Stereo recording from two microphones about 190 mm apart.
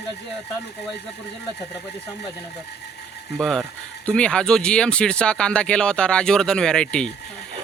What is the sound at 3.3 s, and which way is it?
Speech, centre (ahead or behind).